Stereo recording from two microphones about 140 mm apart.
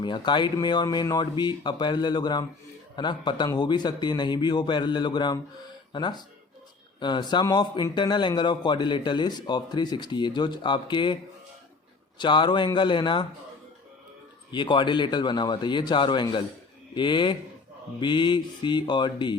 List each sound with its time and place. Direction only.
0.0 s a man's voice: 35° left (ahead or behind)
12.2 s a man's voice: 35° left (ahead or behind)
14.5 s a man's voice: 35° left (ahead or behind)